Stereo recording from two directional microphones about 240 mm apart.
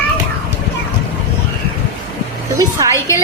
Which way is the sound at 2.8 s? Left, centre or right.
Centre.